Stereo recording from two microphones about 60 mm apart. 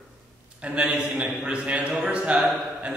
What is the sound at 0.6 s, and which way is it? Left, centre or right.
A man's voice, centre.